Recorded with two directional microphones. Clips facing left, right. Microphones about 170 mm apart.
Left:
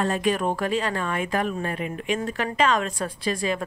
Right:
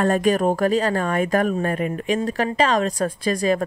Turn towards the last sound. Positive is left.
turn(degrees=-40)  # may be behind; listen again after turning